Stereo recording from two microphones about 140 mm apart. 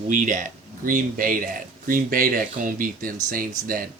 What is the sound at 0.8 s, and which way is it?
Speech, 85° right.